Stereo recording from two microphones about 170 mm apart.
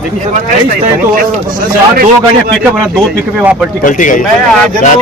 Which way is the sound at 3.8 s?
50° left (ahead or behind).